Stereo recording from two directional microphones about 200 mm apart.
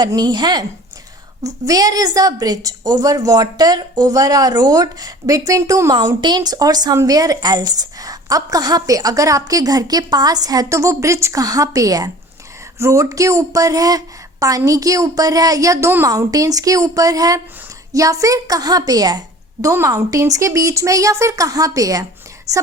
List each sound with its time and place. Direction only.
0.0 s a woman's voice: 20° right (ahead or behind)